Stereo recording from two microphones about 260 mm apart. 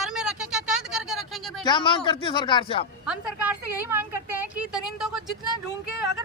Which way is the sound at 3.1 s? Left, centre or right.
Centre.